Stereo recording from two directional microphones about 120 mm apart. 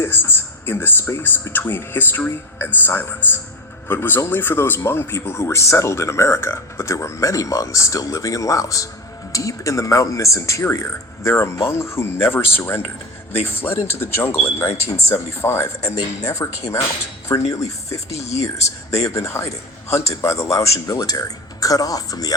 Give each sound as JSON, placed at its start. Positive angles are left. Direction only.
{"t": 0.0, "sound": "a man's voice", "side_deg": 20}
{"t": 18.1, "sound": "speech", "side_deg": 60}
{"t": 19.0, "sound": "a man's voice", "side_deg": 25}